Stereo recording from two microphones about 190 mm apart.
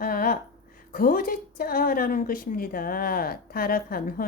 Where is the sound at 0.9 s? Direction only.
50° left (ahead or behind).